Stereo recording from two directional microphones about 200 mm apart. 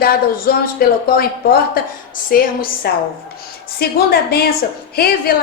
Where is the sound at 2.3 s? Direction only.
50° left (ahead or behind).